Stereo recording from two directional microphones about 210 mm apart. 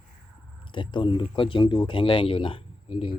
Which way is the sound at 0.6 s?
25° left (ahead or behind).